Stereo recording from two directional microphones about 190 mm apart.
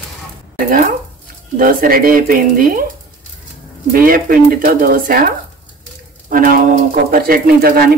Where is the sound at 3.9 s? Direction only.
50° right (ahead or behind).